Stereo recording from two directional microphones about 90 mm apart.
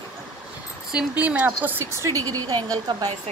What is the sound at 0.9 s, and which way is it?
Speech, 10° right (ahead or behind).